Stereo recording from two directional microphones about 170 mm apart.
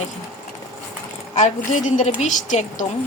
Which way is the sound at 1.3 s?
45° left (ahead or behind).